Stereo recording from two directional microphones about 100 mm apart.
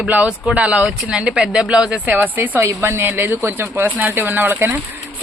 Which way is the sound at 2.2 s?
20° right (ahead or behind).